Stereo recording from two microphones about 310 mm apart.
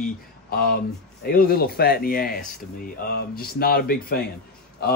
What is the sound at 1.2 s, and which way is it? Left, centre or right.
Speech, left.